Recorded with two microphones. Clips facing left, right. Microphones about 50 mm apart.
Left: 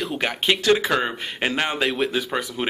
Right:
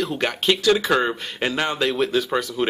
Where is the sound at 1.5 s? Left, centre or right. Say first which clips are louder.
Right 1 dB; centre.